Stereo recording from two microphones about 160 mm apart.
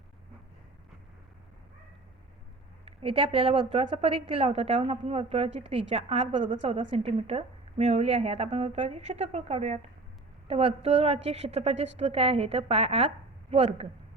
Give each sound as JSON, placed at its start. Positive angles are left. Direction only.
{"t": 2.8, "sound": "a woman's voice", "side_deg": -35}